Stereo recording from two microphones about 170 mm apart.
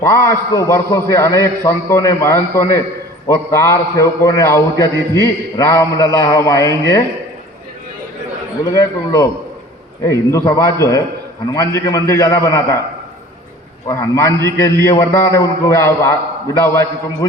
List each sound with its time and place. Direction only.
0.0 s a man's voice: 15° left (ahead or behind)
8.7 s a man's voice: 20° left (ahead or behind)
13.8 s a man's voice: 20° left (ahead or behind)